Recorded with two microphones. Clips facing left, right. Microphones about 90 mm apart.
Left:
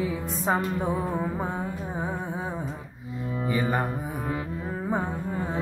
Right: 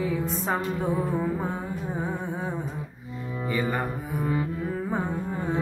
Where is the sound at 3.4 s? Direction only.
15° left (ahead or behind).